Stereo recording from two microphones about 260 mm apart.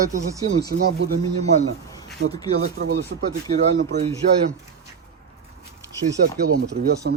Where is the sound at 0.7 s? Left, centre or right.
Right.